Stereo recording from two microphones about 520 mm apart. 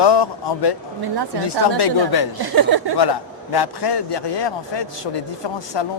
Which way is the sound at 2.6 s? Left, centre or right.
Right.